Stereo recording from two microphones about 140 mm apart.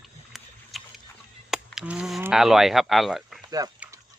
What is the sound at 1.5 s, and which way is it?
Honk, 5° right (ahead or behind).